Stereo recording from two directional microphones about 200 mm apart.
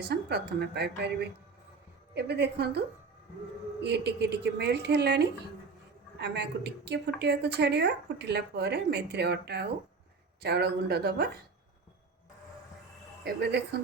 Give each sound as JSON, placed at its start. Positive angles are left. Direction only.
{"t": 0.0, "sound": "a woman's voice", "side_deg": -55}
{"t": 3.8, "sound": "a woman's voice", "side_deg": -55}
{"t": 13.2, "sound": "speech", "side_deg": -50}